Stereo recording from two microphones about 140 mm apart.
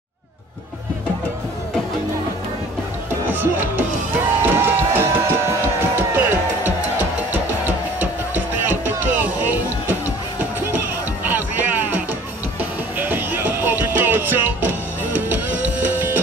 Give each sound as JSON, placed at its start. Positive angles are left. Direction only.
{"t": 3.3, "sound": "music", "side_deg": -15}
{"t": 11.2, "sound": "music", "side_deg": -15}